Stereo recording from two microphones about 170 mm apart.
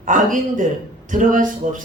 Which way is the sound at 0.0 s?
50° right (ahead or behind).